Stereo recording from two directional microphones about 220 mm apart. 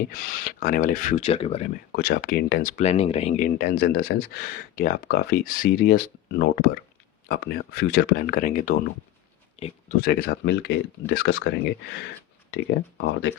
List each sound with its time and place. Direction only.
0.1 s speech: 40° left (ahead or behind)
1.9 s speech: 45° left (ahead or behind)
10.0 s speech: 50° left (ahead or behind)
13.0 s speech: 55° left (ahead or behind)